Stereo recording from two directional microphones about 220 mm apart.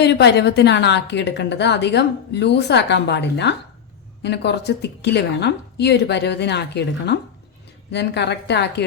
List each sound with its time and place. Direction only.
0.0 s a woman's voice: 50° left (ahead or behind)